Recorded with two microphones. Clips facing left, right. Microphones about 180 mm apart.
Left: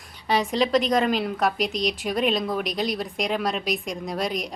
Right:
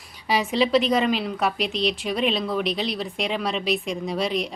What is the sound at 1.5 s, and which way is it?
Speech, 40° left (ahead or behind).